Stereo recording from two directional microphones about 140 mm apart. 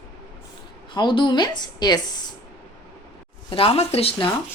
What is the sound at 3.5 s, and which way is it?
Speech, 40° left (ahead or behind).